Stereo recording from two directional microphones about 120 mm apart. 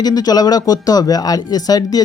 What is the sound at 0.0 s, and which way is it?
Speech, 35° left (ahead or behind).